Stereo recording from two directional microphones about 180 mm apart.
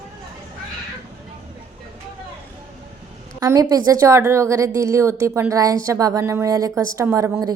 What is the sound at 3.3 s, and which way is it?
A woman's voice, 20° right (ahead or behind).